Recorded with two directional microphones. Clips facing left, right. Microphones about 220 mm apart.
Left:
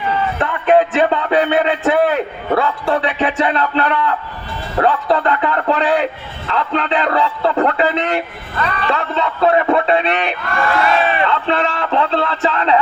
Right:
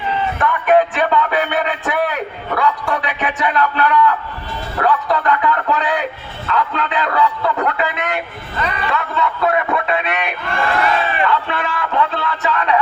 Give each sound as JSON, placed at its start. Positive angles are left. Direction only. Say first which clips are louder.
{"t": 0.3, "sound": "a sound", "louder": "even", "side_deg": 25}
{"t": 2.6, "sound": "speech", "louder": "left 1 dB", "side_deg": 30}
{"t": 8.5, "sound": "speech", "louder": "left 1 dB", "side_deg": -15}
{"t": 8.9, "sound": "speech", "louder": "left 2 dB", "side_deg": 30}